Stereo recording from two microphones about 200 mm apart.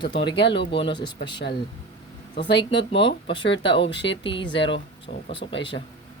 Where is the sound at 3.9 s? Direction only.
65° left (ahead or behind).